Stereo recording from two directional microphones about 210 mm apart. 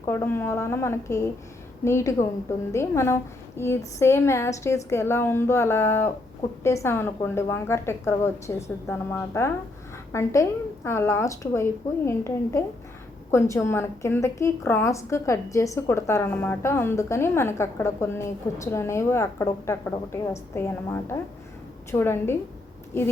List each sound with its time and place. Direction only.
0.0 s a woman's voice: 10° left (ahead or behind)